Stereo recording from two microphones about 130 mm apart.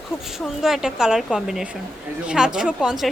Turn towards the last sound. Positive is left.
turn(degrees=-5)  # may be behind; listen again after turning